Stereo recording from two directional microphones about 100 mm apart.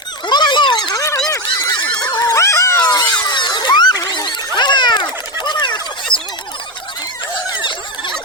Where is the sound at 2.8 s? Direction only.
45° left (ahead or behind).